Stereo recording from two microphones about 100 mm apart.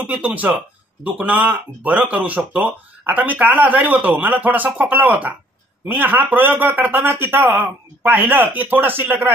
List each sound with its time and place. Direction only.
0.0 s a man's voice: 15° right (ahead or behind)